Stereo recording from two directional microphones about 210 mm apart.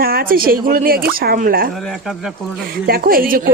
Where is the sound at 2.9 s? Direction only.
45° right (ahead or behind).